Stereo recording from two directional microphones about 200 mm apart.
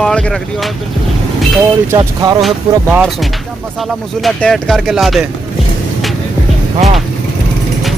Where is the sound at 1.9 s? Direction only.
20° right (ahead or behind).